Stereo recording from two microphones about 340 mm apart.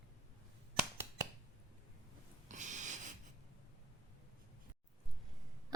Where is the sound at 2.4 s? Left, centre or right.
Right.